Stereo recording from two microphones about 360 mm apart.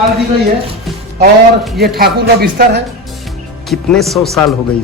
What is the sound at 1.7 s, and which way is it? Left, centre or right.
A man's voice, right.